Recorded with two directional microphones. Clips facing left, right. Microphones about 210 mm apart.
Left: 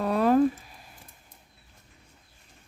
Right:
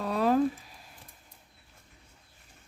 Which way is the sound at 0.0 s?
55° left (ahead or behind).